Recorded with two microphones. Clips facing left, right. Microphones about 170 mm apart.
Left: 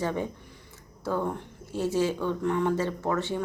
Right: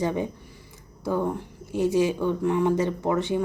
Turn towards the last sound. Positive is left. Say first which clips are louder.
# right 4 dB
turn(degrees=-15)  # may be behind; listen again after turning